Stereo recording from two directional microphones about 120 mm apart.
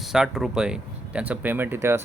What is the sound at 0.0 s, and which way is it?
Speech, centre (ahead or behind).